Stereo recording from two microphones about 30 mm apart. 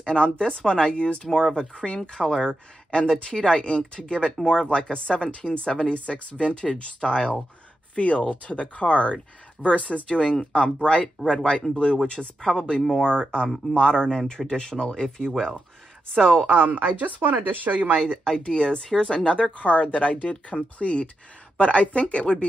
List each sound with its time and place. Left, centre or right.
0.0 s speech: left
1.3 s speech: left
12.4 s speech: left
16.4 s speech: right
18.0 s speech: left
18.4 s speech: left
22.3 s speech: left